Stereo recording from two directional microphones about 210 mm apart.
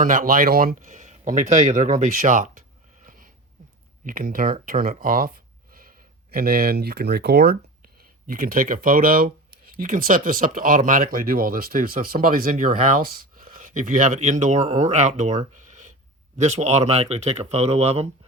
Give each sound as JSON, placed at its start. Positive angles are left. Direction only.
{"t": 0.0, "sound": "speech", "side_deg": -40}
{"t": 15.5, "sound": "a sound", "side_deg": -35}
{"t": 16.4, "sound": "speech", "side_deg": -30}